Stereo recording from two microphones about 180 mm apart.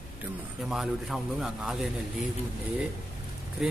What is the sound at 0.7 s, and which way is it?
A man's voice, centre (ahead or behind).